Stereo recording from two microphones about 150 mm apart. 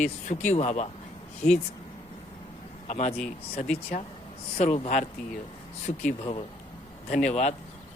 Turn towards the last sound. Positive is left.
turn(degrees=50)  # may be behind; listen again after turning